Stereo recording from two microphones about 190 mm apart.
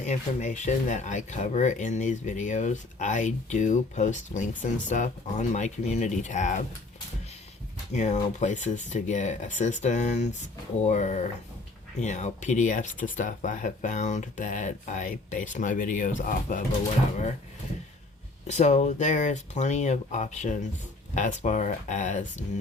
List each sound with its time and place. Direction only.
0.0 s speech: 40° left (ahead or behind)
7.9 s speech: 40° left (ahead or behind)
18.4 s speech: 40° left (ahead or behind)